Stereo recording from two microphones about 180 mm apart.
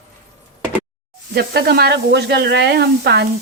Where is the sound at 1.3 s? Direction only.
60° right (ahead or behind).